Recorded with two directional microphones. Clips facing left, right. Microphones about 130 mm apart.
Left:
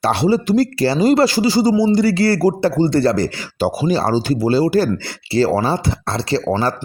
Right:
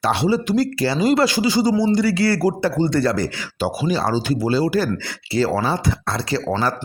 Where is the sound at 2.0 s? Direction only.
35° left (ahead or behind).